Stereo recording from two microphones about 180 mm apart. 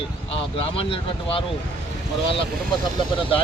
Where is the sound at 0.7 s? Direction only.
30° left (ahead or behind).